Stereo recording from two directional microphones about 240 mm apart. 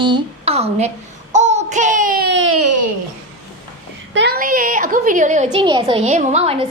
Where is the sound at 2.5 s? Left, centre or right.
Right.